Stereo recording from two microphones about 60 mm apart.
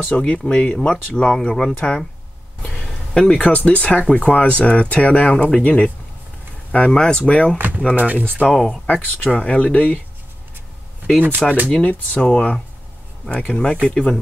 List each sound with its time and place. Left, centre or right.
0.2 s speech: centre
2.6 s a sound: centre
3.2 s speech: centre
7.5 s speech: right
8.5 s speech: centre
8.8 s speech: left
11.1 s speech: right
11.7 s speech: left